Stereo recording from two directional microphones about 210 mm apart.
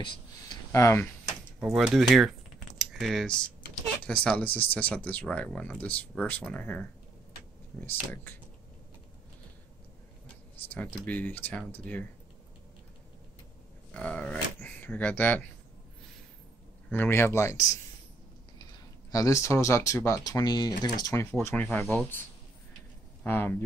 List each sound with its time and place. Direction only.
0.0 s speech: 20° left (ahead or behind)
1.6 s speech: centre (ahead or behind)
10.7 s speech: 10° left (ahead or behind)
13.9 s speech: 5° left (ahead or behind)
16.9 s speech: 10° left (ahead or behind)
19.1 s speech: 15° left (ahead or behind)
23.2 s speech: 10° left (ahead or behind)